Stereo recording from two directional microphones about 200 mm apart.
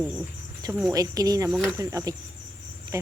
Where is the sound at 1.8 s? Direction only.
15° right (ahead or behind).